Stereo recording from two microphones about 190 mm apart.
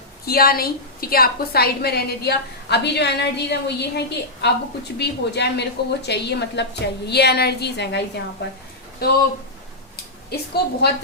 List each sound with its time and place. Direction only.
0.3 s a woman's voice: 50° left (ahead or behind)
10.5 s a woman's voice: 60° left (ahead or behind)